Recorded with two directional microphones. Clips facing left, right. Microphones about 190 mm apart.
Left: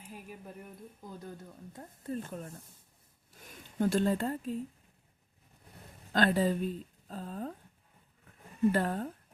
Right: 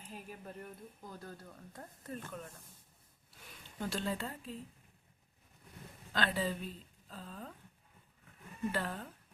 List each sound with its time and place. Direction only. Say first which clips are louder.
0.1 s speech: left 1 dB; 10° left (ahead or behind)
2.1 s speech: left 5 dB; 35° left (ahead or behind)
3.3 s speech: left 11 dB; 45° left (ahead or behind)
6.1 s speech: left 8 dB; 45° left (ahead or behind)
8.7 s speech: left 8 dB; 45° left (ahead or behind)